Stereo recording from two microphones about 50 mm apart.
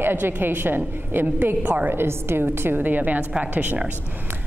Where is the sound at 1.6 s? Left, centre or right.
Right.